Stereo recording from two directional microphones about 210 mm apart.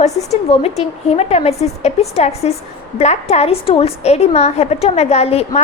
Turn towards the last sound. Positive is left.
turn(degrees=30)  # may be behind; listen again after turning